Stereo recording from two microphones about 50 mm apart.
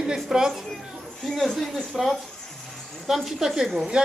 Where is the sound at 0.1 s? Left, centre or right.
Centre.